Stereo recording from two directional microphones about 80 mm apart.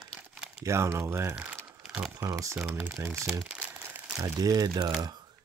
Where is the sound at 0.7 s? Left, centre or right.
Right.